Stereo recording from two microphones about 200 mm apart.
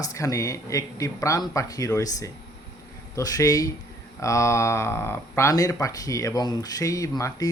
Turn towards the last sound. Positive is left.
turn(degrees=15)  # may be behind; listen again after turning